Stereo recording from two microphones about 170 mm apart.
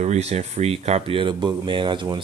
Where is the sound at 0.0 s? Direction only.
40° right (ahead or behind).